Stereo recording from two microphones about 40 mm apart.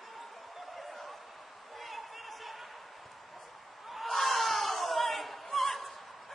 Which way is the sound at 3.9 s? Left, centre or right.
Centre.